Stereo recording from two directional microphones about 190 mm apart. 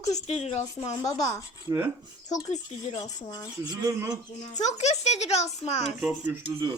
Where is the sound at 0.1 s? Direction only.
35° left (ahead or behind).